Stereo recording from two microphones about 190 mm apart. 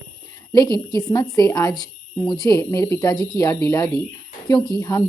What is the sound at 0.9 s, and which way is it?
Speech, 20° left (ahead or behind).